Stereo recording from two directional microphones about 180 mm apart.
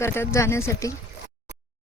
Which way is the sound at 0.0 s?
15° left (ahead or behind).